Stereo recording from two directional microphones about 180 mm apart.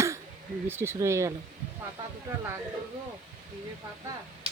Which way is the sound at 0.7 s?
15° right (ahead or behind).